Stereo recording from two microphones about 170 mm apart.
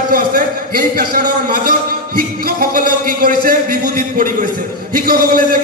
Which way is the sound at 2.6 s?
55° right (ahead or behind).